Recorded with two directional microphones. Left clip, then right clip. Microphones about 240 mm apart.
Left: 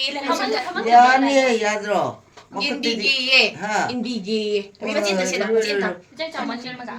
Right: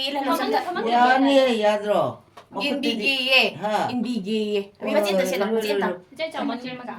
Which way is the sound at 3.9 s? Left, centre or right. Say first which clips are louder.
Left 2 dB; right.